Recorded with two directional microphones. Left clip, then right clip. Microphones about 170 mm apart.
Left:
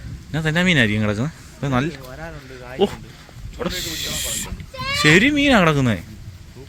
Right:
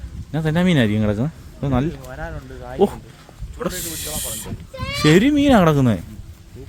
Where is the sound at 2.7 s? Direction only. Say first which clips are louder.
Right 2 dB; 25° right (ahead or behind).